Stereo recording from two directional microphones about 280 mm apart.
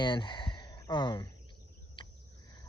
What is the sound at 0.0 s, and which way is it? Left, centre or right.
Speech, centre.